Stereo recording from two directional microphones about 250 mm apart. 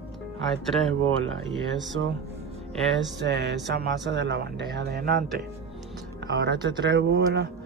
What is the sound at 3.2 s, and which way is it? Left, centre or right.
Speech, right.